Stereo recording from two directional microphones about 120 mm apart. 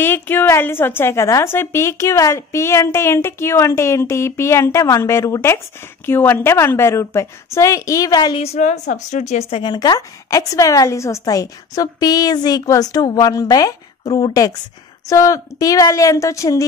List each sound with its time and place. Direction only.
0.0 s a woman's voice: 15° left (ahead or behind); by 8.4 s 35° left (ahead or behind)
8.4 s a woman's voice: 70° left (ahead or behind)
9.6 s a woman's voice: 35° left (ahead or behind)